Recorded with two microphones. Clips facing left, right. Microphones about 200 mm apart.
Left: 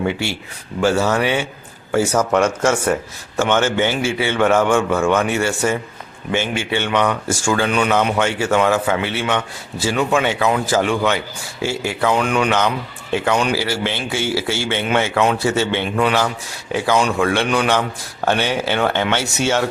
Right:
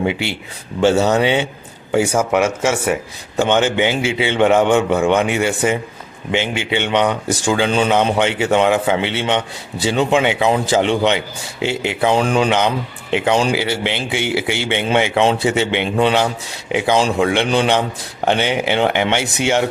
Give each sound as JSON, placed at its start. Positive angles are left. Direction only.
{"t": 0.0, "sound": "a man's voice", "side_deg": -15}
{"t": 12.2, "sound": "speech", "side_deg": -30}
{"t": 12.5, "sound": "a man's voice", "side_deg": -20}